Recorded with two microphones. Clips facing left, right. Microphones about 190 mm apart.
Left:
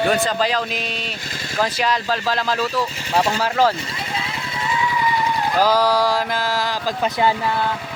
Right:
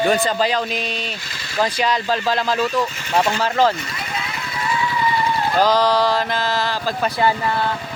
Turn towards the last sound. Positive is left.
turn(degrees=5)  # may be behind; listen again after turning